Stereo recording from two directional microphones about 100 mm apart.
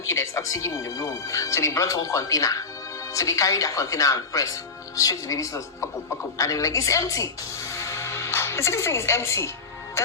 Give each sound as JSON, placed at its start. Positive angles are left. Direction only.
{"t": 0.1, "sound": "speech", "side_deg": 30}
{"t": 7.8, "sound": "music", "side_deg": 25}